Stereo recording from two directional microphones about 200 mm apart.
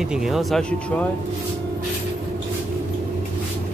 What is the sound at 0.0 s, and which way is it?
Speech, centre (ahead or behind).